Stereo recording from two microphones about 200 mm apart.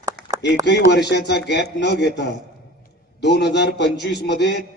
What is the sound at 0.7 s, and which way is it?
A man's voice, 60° left (ahead or behind).